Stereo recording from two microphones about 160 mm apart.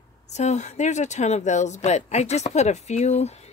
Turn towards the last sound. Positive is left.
turn(degrees=45)  # may be behind; listen again after turning